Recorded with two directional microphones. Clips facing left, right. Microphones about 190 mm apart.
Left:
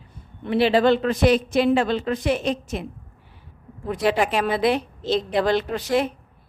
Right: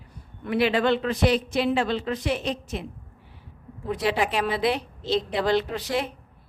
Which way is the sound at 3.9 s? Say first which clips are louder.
Left 3 dB; 50° left (ahead or behind).